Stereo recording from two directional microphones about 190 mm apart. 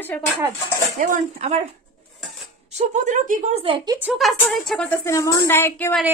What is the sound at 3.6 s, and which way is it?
Speech, 25° right (ahead or behind).